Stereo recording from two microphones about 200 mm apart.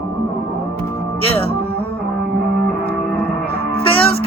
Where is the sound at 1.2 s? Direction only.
30° left (ahead or behind).